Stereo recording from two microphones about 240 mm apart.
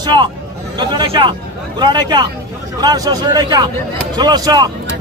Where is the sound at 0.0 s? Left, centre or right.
Centre.